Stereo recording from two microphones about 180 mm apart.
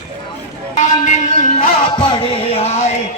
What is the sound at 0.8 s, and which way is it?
Music, 40° left (ahead or behind).